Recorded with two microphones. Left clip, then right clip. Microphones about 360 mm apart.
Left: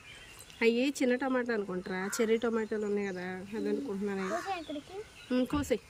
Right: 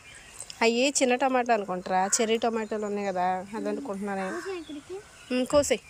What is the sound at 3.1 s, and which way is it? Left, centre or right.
Speech, right.